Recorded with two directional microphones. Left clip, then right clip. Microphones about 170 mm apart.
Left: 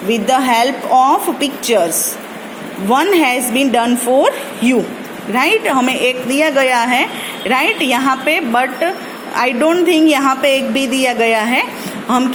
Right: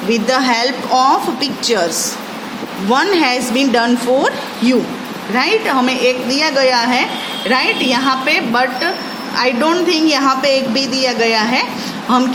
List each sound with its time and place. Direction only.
0.1 s a woman's voice: 20° left (ahead or behind)
2.9 s a woman's voice: 15° left (ahead or behind); by 11.6 s 30° left (ahead or behind)